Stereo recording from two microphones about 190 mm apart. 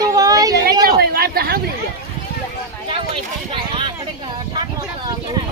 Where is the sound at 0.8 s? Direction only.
55° right (ahead or behind).